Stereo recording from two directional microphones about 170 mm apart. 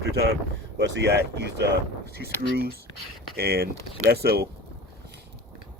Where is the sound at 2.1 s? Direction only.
65° right (ahead or behind).